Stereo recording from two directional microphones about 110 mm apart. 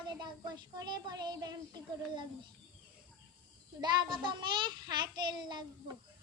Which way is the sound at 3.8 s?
40° right (ahead or behind).